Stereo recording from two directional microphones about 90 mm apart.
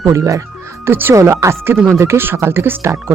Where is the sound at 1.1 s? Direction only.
35° right (ahead or behind).